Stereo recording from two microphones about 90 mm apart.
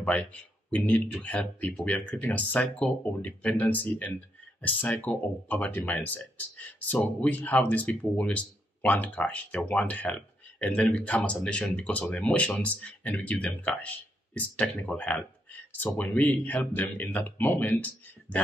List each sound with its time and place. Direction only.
0.0 s speech: 15° left (ahead or behind)